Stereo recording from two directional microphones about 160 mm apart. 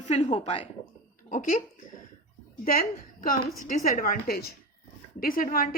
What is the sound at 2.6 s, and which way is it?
A woman's voice, 65° left (ahead or behind).